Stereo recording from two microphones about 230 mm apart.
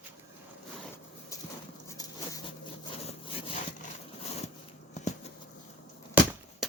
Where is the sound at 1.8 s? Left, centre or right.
Centre.